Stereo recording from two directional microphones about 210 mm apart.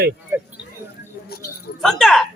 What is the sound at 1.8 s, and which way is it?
Speech, centre (ahead or behind).